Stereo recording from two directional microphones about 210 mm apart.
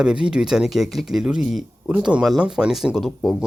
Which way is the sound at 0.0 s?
5° right (ahead or behind).